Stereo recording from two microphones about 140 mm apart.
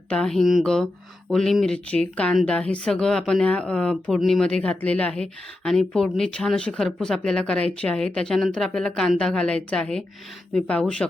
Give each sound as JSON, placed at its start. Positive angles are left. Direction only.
{"t": 0.1, "sound": "speech", "side_deg": 5}